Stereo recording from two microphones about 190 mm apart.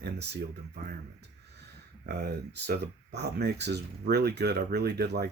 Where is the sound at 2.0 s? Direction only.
60° right (ahead or behind).